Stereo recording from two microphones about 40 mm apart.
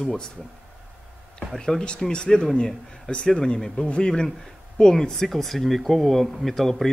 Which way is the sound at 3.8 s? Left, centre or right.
Left.